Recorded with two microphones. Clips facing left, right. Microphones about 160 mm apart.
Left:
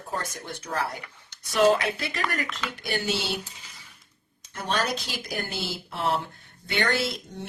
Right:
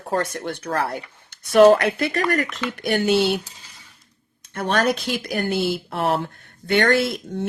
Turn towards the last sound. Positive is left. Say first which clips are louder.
# right 7 dB
turn(degrees=-55)  # may be behind; listen again after turning